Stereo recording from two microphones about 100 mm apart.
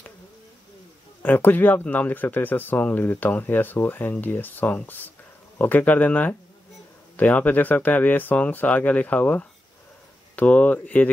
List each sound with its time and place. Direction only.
1.2 s speech: 20° left (ahead or behind)